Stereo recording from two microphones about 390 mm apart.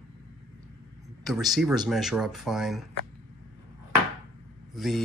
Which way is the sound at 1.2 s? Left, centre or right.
Centre.